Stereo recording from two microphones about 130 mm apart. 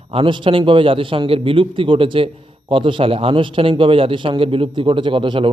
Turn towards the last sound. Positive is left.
turn(degrees=-40)  # may be behind; listen again after turning